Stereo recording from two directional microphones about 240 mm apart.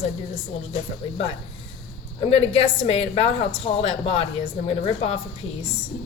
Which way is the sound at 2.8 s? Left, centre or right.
Left.